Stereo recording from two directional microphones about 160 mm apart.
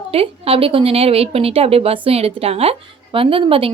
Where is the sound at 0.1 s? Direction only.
35° right (ahead or behind).